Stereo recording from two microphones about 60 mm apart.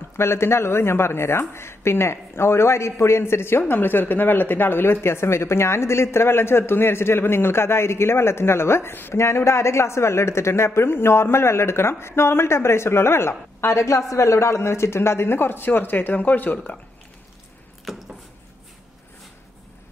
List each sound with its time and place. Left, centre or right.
0.2 s speech: left
9.1 s speech: left
17.8 s a sound: centre